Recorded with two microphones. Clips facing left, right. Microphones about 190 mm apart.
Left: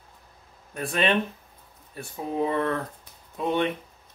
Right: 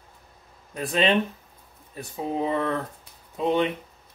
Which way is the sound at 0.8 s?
20° right (ahead or behind).